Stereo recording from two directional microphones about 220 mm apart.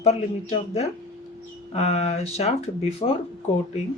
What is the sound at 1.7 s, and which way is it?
Speech, 30° left (ahead or behind).